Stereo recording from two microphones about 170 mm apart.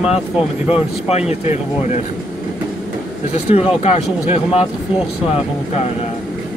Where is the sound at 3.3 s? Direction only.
35° left (ahead or behind).